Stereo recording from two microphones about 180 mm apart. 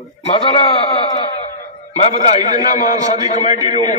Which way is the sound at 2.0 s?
40° left (ahead or behind).